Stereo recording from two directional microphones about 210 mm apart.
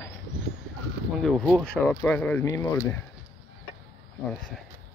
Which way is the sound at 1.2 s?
Centre (ahead or behind).